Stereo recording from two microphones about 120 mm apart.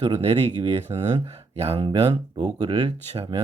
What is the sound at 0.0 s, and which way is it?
Speech, 60° right (ahead or behind).